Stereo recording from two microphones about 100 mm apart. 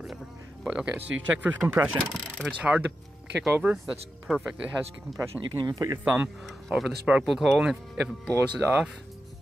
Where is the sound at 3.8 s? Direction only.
5° right (ahead or behind).